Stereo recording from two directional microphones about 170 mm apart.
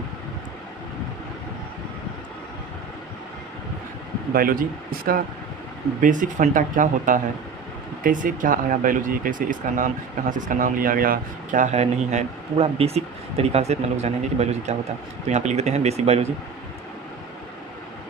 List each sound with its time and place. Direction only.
4.4 s speech: 55° right (ahead or behind); by 16.2 s 40° right (ahead or behind)